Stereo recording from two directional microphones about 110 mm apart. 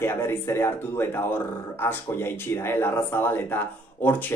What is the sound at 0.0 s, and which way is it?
Speech, 20° left (ahead or behind).